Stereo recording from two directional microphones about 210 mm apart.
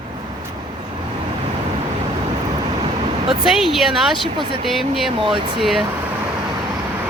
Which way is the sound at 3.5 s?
Centre (ahead or behind).